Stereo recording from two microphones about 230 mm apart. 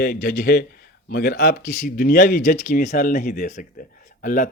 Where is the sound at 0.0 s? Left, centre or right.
Left.